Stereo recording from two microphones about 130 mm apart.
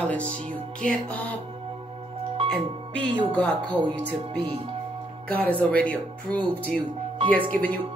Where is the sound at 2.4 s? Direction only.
50° right (ahead or behind).